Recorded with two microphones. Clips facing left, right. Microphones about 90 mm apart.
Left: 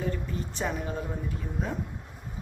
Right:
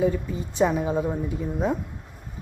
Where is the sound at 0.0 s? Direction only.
10° right (ahead or behind).